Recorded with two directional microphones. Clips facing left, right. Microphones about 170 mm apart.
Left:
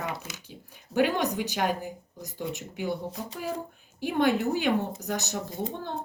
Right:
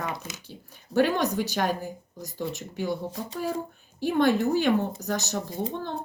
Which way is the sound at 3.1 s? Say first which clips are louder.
Right 3 dB; centre (ahead or behind).